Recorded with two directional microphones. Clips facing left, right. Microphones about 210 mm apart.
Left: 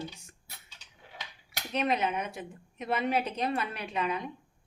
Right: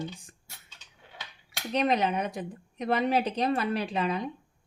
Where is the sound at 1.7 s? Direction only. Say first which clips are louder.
Right 3 dB; 35° right (ahead or behind).